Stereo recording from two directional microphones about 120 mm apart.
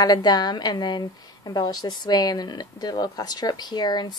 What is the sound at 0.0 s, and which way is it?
A woman's voice, 35° left (ahead or behind).